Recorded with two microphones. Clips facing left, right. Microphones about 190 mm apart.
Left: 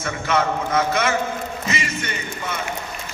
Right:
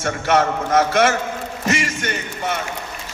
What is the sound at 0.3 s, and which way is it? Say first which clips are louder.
Speech: right 3 dB; 45° right (ahead or behind).